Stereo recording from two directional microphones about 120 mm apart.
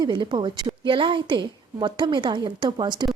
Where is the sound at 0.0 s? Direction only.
40° right (ahead or behind).